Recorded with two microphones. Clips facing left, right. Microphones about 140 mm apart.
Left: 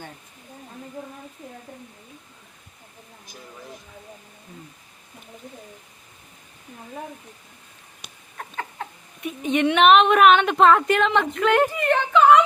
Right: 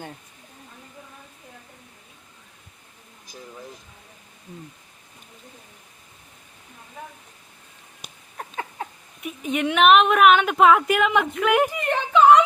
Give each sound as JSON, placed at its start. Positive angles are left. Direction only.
{"t": 8.4, "sound": "cat", "side_deg": -15}
{"t": 9.2, "sound": "a woman's voice", "side_deg": -5}